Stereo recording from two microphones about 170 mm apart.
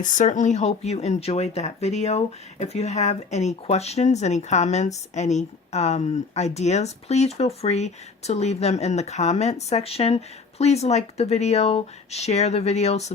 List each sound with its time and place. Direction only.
0.0 s speech: 45° left (ahead or behind)